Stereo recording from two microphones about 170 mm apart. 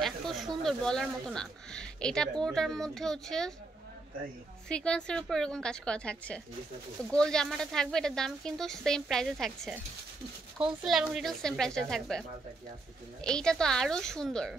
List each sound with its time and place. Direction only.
0.0 s a sound: centre (ahead or behind)
0.7 s speech: 5° left (ahead or behind)
4.6 s speech: 5° left (ahead or behind)